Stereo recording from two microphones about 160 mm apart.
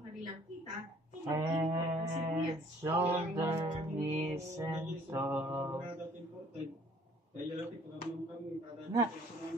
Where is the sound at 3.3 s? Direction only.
20° right (ahead or behind).